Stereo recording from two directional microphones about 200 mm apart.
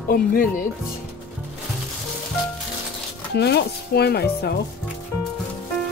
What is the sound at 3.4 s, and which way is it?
Speech, 55° left (ahead or behind).